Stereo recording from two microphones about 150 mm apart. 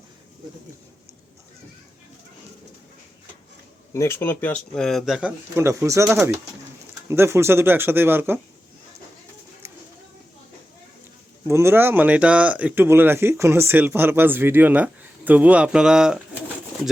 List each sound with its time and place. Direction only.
3.9 s speech: 20° left (ahead or behind); by 5.3 s centre (ahead or behind)
5.5 s speech: 20° right (ahead or behind)
7.1 s speech: 15° right (ahead or behind)
9.6 s a sound: 20° right (ahead or behind)
11.4 s speech: 20° right (ahead or behind)